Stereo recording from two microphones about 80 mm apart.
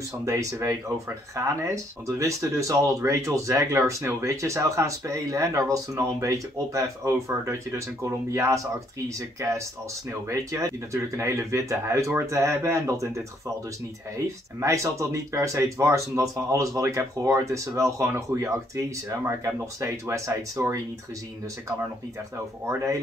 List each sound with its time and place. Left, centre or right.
0.2 s speech: right